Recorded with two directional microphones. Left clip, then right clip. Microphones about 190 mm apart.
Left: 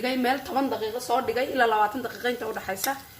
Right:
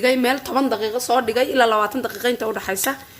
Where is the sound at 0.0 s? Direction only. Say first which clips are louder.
Right 7 dB; 40° right (ahead or behind).